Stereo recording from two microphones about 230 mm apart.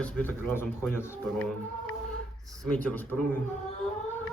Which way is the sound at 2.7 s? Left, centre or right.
Centre.